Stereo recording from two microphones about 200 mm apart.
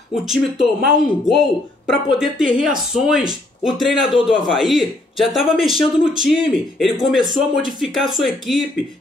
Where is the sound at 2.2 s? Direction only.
5° right (ahead or behind).